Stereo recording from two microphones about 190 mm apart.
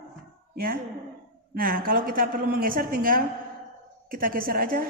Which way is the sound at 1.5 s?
50° right (ahead or behind).